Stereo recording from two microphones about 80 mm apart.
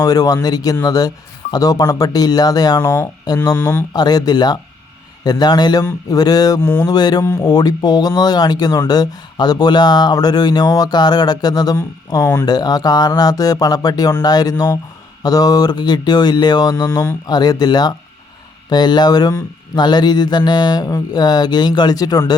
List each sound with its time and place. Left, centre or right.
0.0 s speech: left
3.3 s speech: left
3.9 s speech: left
6.6 s speech: left
6.9 s speech: left
12.2 s speech: left
12.5 s speech: left
17.2 s speech: left